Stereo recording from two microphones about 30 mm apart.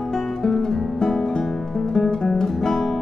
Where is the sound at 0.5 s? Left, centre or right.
Left.